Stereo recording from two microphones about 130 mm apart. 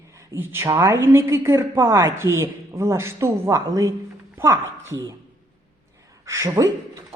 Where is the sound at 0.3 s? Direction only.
20° right (ahead or behind).